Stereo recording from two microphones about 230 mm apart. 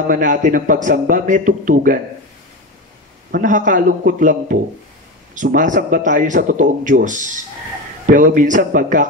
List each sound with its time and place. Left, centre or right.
0.1 s speech: right
3.3 s speech: right